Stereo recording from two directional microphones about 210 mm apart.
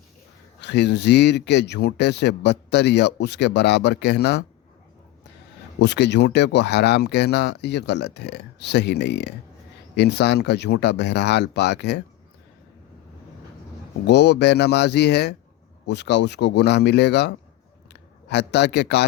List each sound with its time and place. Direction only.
0.6 s speech: 55° left (ahead or behind)
5.8 s speech: 55° left (ahead or behind)
14.1 s speech: 55° left (ahead or behind)